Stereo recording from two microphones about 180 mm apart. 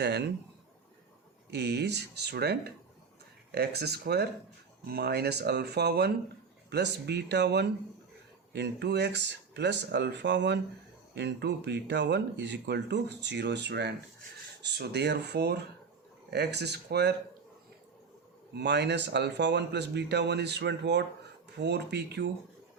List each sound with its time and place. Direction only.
0.0 s speech: 70° right (ahead or behind)
1.5 s speech: 70° right (ahead or behind)
18.5 s speech: 70° right (ahead or behind)